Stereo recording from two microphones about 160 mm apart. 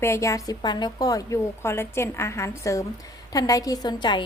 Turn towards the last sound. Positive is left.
turn(degrees=30)  # may be behind; listen again after turning